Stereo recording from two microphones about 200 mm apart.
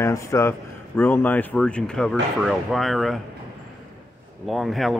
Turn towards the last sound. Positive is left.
turn(degrees=0)  # may be behind; listen again after turning